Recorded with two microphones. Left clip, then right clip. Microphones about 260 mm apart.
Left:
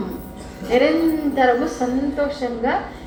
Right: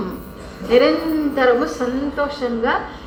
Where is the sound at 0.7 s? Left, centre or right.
Right.